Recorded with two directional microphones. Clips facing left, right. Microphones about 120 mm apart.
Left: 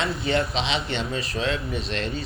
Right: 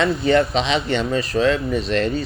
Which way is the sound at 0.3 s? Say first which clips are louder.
Right 7 dB; 45° right (ahead or behind).